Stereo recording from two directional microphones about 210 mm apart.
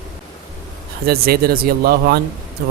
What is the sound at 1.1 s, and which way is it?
A man's voice, 45° right (ahead or behind).